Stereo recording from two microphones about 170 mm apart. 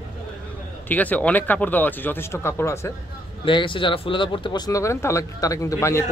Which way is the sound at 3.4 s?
30° left (ahead or behind).